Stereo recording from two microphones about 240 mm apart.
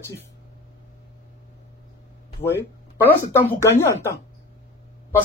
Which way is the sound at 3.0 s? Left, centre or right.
Centre.